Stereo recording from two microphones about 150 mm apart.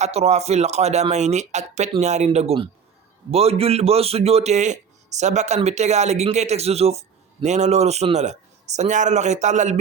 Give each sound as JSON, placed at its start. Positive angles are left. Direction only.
{"t": 0.0, "sound": "a man's voice", "side_deg": -45}